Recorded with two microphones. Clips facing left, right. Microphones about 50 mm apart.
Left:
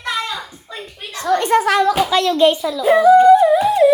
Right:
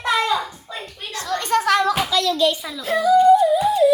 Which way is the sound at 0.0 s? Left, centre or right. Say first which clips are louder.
Right 4 dB; centre.